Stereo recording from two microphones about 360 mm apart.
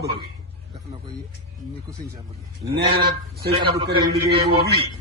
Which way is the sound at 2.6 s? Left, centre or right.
Right.